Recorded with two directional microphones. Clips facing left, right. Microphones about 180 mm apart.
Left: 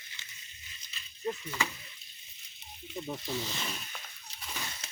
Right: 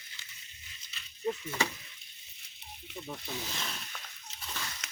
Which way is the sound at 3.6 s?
10° left (ahead or behind).